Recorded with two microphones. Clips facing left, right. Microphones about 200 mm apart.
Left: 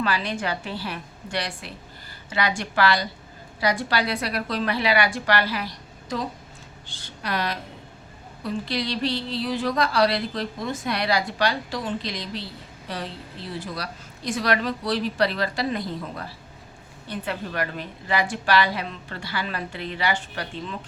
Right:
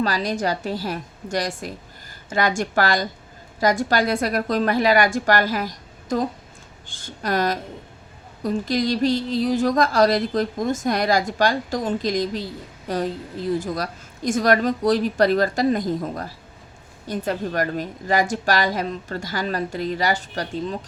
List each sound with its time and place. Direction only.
0.0 s a woman's voice: 40° right (ahead or behind)